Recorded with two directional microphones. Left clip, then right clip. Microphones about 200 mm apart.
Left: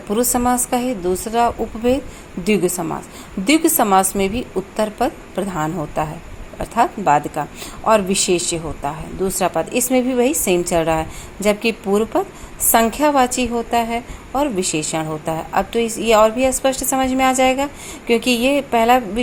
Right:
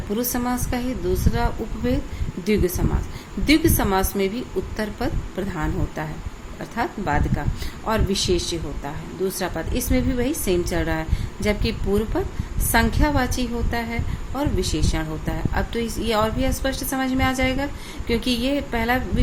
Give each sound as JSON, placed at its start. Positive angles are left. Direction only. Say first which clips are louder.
{"t": 0.2, "sound": "a woman's voice", "louder": "left 10 dB", "side_deg": 25}